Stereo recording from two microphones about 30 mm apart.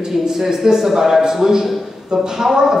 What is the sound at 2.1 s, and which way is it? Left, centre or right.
Speech, right.